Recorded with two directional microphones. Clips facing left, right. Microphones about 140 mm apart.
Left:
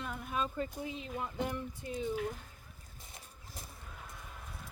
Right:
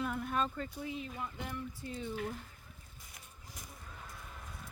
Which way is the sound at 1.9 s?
15° left (ahead or behind).